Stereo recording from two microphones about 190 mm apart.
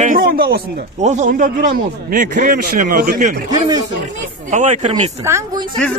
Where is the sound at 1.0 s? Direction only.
40° right (ahead or behind).